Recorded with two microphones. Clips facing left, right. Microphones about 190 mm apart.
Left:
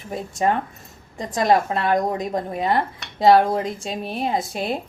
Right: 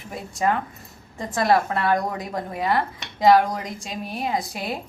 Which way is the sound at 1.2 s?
15° left (ahead or behind).